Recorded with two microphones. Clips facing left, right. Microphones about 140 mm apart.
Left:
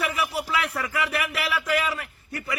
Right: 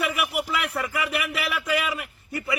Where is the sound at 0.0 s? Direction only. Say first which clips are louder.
Right 1 dB; 15° right (ahead or behind).